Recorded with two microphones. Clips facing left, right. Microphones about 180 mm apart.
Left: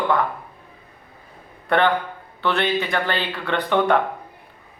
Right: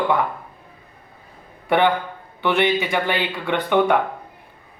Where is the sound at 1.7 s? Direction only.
15° right (ahead or behind).